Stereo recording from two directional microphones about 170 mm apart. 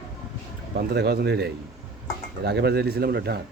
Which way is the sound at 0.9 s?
75° right (ahead or behind).